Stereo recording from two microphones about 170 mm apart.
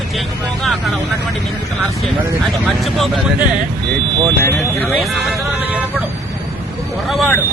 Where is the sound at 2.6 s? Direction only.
Centre (ahead or behind).